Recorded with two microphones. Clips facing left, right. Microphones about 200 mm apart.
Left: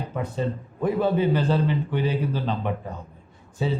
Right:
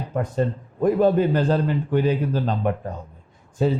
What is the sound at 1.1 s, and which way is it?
A man's voice, 45° right (ahead or behind).